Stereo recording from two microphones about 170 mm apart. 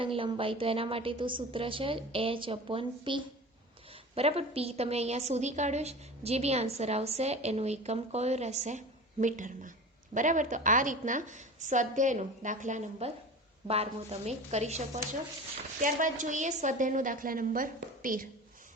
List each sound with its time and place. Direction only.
0.0 s a woman's voice: 30° right (ahead or behind); by 18.3 s 55° right (ahead or behind)